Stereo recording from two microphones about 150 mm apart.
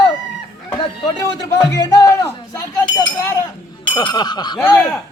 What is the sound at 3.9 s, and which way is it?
Snicker, 30° left (ahead or behind).